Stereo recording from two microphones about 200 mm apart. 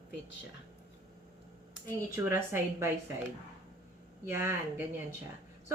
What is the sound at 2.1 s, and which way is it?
Speech, 15° right (ahead or behind).